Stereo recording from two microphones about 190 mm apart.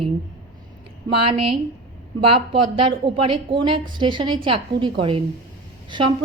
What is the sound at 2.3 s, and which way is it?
A woman's voice, 25° right (ahead or behind).